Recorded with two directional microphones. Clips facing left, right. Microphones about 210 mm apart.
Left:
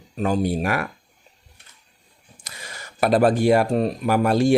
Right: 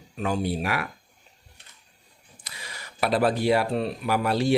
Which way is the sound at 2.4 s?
45° left (ahead or behind).